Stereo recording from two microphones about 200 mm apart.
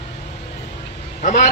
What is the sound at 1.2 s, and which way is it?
Speech, 35° left (ahead or behind).